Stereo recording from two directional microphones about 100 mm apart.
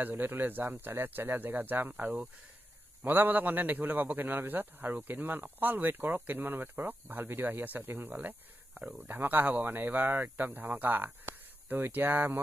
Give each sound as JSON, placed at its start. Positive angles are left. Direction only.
{"t": 0.0, "sound": "a man's voice", "side_deg": -20}